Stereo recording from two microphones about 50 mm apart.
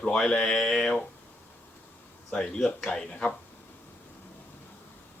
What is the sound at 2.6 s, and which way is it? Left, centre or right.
Speech, centre.